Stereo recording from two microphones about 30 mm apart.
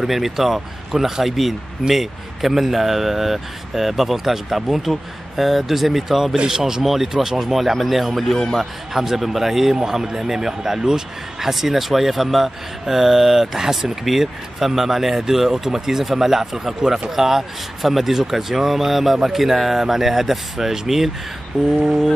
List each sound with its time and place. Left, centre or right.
0.0 s speech: centre
6.3 s speech: right
6.6 s a man's voice: centre